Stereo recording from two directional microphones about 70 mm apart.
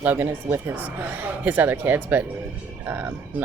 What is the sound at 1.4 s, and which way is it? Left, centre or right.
A woman's voice, right.